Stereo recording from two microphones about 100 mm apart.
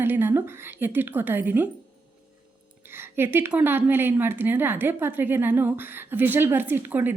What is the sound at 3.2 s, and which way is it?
A woman's voice, 20° right (ahead or behind).